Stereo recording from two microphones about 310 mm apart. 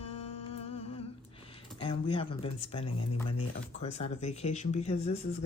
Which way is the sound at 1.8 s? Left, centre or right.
Centre.